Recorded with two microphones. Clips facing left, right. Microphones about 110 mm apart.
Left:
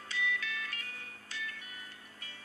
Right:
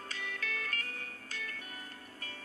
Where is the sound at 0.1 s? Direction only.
45° right (ahead or behind).